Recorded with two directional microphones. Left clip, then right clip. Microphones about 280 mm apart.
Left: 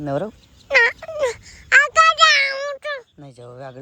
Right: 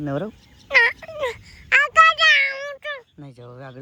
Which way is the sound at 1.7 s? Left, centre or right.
Centre.